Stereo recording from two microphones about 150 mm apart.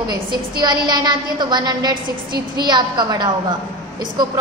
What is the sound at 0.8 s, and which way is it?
A woman's voice, 30° right (ahead or behind).